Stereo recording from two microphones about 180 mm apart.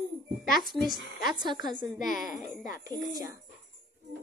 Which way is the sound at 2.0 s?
50° left (ahead or behind).